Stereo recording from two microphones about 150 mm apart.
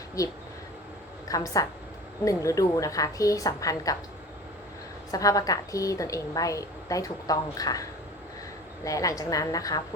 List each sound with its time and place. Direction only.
0.2 s a woman's voice: 25° left (ahead or behind)
5.1 s a woman's voice: 25° left (ahead or behind)